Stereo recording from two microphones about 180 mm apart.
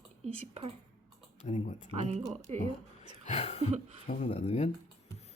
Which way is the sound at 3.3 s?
35° left (ahead or behind).